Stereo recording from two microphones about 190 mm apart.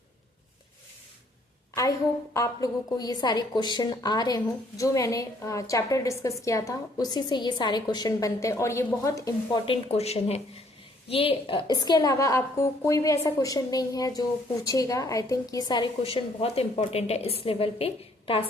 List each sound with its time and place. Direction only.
2.3 s a woman's voice: 15° left (ahead or behind)
9.6 s a woman's voice: 35° left (ahead or behind)